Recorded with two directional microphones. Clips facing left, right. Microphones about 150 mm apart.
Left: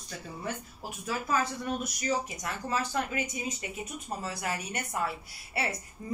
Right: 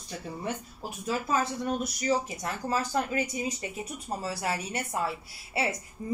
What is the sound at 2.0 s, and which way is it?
Speech, 35° right (ahead or behind).